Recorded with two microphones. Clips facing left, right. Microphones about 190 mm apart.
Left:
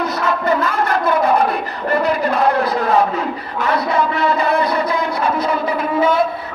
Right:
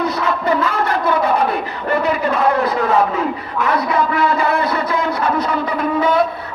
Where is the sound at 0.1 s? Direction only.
45° left (ahead or behind).